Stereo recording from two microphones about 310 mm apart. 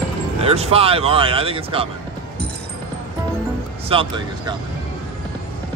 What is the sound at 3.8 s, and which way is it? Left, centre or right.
Speech, centre.